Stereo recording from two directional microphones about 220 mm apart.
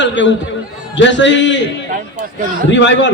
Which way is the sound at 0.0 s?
55° left (ahead or behind).